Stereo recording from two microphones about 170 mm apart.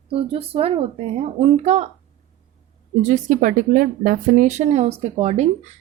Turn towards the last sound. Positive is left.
turn(degrees=-40)  # may be behind; listen again after turning